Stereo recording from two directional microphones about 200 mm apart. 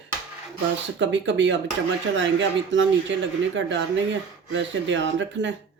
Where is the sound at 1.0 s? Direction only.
65° right (ahead or behind).